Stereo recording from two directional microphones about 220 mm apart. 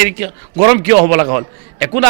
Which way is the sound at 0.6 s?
20° right (ahead or behind).